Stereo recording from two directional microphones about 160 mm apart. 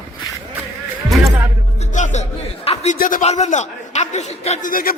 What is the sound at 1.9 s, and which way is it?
Speech, 50° left (ahead or behind).